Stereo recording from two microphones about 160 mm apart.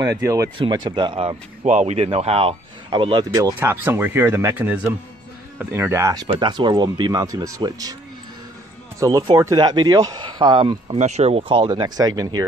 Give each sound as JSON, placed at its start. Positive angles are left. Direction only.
{"t": 0.0, "sound": "speech", "side_deg": -20}
{"t": 1.7, "sound": "speech", "side_deg": -45}
{"t": 2.9, "sound": "speech", "side_deg": -25}
{"t": 3.5, "sound": "speech", "side_deg": -15}
{"t": 6.2, "sound": "speech", "side_deg": -30}
{"t": 9.0, "sound": "speech", "side_deg": -25}
{"t": 11.0, "sound": "speech", "side_deg": -45}